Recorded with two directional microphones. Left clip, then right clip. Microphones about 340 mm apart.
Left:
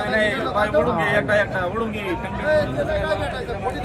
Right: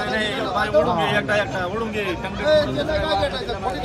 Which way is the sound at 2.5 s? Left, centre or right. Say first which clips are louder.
Right 2 dB; right.